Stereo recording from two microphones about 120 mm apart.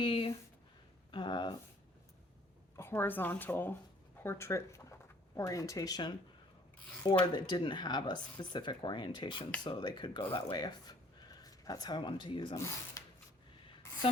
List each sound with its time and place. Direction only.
0.0 s a sound: 45° left (ahead or behind)
1.1 s speech: 40° left (ahead or behind)
2.7 s a woman's voice: 20° left (ahead or behind); by 6.1 s 35° left (ahead or behind)
7.3 s speech: 40° left (ahead or behind)
12.5 s speech: 25° left (ahead or behind)